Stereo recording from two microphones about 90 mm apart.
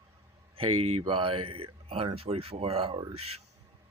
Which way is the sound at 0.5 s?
85° right.